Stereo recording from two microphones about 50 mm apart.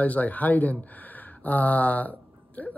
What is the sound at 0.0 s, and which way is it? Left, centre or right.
Speech, left.